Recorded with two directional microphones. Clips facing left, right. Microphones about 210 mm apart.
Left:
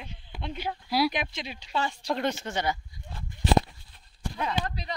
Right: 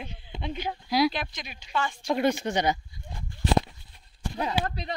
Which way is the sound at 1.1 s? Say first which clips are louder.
Left 1 dB; 25° left (ahead or behind).